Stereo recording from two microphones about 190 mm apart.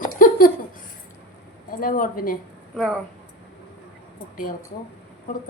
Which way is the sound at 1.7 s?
45° left (ahead or behind).